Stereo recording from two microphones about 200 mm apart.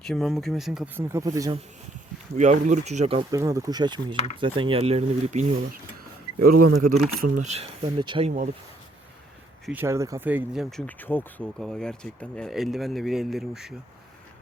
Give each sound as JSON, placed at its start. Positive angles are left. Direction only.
{"t": 0.1, "sound": "speech", "side_deg": 0}
{"t": 1.0, "sound": "speech", "side_deg": -15}
{"t": 2.3, "sound": "speech", "side_deg": -35}
{"t": 3.3, "sound": "speech", "side_deg": -15}
{"t": 6.4, "sound": "speech", "side_deg": -45}
{"t": 9.7, "sound": "speech", "side_deg": -15}